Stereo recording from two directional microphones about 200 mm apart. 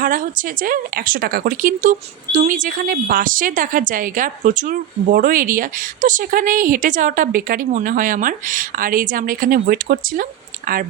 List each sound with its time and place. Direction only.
0.0 s speech: 45° right (ahead or behind)